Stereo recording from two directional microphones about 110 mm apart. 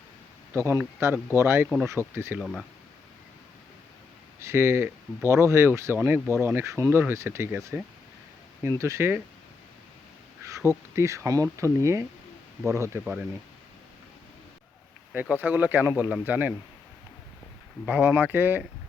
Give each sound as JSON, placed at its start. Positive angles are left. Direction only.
{"t": 0.5, "sound": "speech", "side_deg": -25}
{"t": 2.4, "sound": "speech", "side_deg": 0}
{"t": 4.4, "sound": "speech", "side_deg": -25}
{"t": 8.8, "sound": "speech", "side_deg": -25}
{"t": 10.4, "sound": "speech", "side_deg": -25}
{"t": 15.1, "sound": "speech", "side_deg": -15}
{"t": 17.8, "sound": "speech", "side_deg": -15}